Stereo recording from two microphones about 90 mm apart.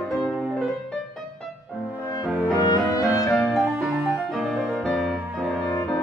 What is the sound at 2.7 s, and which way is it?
Music, 40° left (ahead or behind).